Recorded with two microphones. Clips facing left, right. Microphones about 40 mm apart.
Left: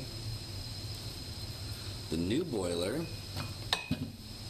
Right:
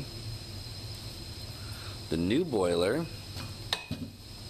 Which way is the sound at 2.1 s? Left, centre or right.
Right.